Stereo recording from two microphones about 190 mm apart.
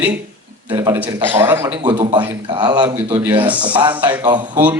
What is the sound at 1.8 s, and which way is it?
A man's voice, 25° right (ahead or behind).